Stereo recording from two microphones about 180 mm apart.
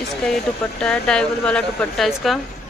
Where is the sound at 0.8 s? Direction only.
5° left (ahead or behind).